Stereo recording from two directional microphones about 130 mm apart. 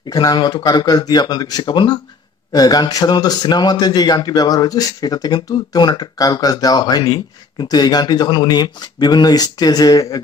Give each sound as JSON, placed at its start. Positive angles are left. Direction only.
{"t": 0.1, "sound": "speech", "side_deg": 30}